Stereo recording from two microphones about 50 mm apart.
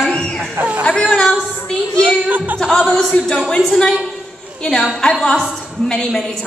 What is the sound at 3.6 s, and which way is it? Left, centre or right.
Speech, centre.